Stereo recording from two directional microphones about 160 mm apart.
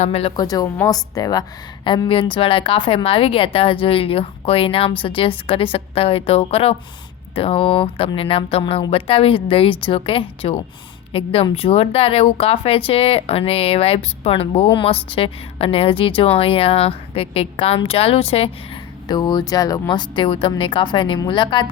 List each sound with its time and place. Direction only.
0.0 s speech: 40° left (ahead or behind)
0.4 s a woman's voice: 25° left (ahead or behind)